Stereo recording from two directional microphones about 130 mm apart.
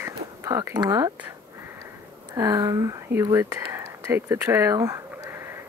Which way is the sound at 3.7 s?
20° right (ahead or behind).